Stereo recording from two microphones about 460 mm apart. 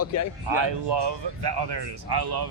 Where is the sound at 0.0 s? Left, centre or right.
Left.